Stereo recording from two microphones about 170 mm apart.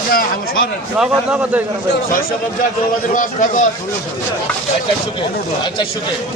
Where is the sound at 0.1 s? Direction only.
60° left (ahead or behind).